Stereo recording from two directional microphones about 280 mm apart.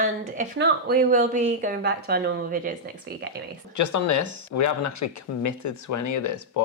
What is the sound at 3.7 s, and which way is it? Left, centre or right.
Speech, left.